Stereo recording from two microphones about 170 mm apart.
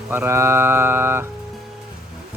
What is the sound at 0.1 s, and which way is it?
Music, 15° right (ahead or behind).